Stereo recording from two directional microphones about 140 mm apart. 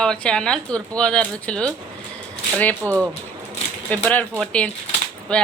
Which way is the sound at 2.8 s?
20° right (ahead or behind).